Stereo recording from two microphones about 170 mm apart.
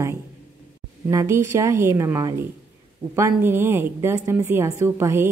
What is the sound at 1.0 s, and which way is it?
A woman's voice, 15° right (ahead or behind).